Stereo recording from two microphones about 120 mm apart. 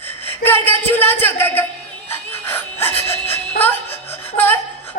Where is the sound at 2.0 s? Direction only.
20° left (ahead or behind).